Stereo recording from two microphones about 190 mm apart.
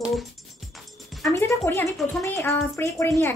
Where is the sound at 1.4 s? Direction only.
10° left (ahead or behind).